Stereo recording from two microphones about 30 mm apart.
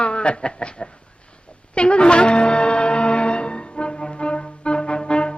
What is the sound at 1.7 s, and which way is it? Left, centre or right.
Music, left.